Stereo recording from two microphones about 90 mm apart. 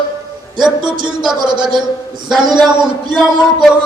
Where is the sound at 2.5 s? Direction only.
55° right (ahead or behind).